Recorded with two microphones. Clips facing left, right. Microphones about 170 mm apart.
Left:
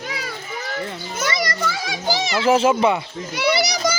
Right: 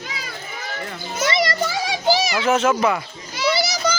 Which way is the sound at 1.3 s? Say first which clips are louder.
Right 4 dB; 25° right (ahead or behind).